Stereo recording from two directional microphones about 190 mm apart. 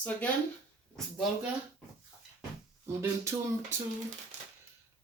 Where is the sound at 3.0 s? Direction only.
15° right (ahead or behind).